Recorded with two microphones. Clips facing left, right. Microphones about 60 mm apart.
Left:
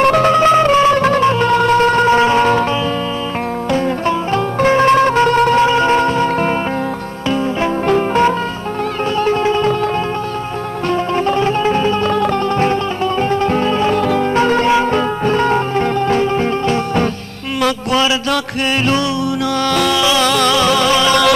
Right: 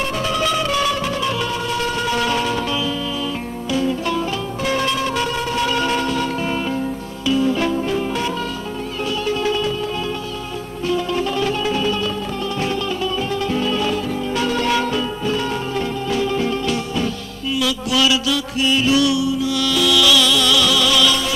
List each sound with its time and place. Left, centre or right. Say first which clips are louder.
0.0 s music: left 11 dB; left
0.3 s music: left 9 dB; left
0.9 s music: left 9 dB; left
3.7 s music: left 3 dB; left
5.6 s music: left 7 dB; left
7.8 s music: left 8 dB; left
10.9 s music: left 4 dB; left
17.6 s a sound: left 5 dB; left
18.3 s music: left 2 dB; left
20.0 s music: left 2 dB; left
20.2 s music: left 5 dB; left